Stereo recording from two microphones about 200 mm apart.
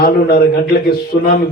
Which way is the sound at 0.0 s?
50° left (ahead or behind).